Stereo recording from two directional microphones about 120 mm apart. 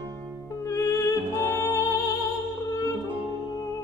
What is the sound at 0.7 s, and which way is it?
Music, 25° left (ahead or behind).